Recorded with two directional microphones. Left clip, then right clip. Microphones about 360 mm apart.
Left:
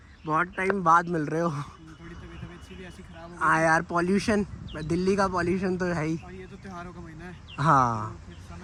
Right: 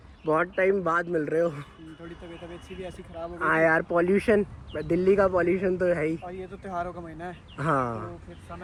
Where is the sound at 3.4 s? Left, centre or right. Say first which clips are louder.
Even; centre.